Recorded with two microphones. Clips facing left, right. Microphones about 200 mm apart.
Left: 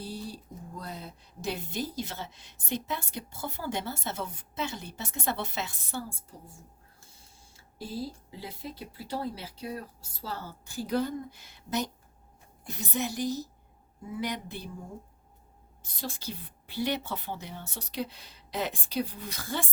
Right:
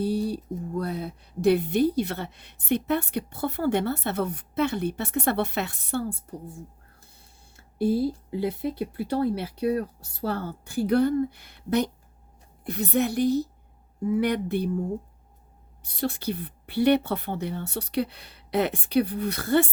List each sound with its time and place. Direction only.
0.0 s a sound: 60° right (ahead or behind)
0.8 s speech: 60° right (ahead or behind)
15.8 s speech: 65° right (ahead or behind)